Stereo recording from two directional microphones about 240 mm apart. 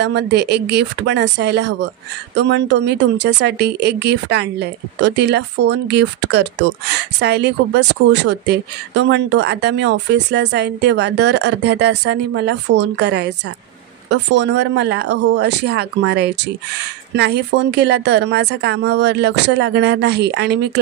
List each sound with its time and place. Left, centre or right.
0.0 s a woman's voice: right